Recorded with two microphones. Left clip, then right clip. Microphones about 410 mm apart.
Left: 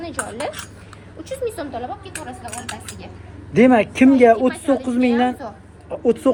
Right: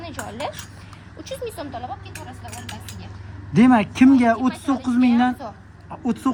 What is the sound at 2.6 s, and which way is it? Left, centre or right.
A woman's voice, centre.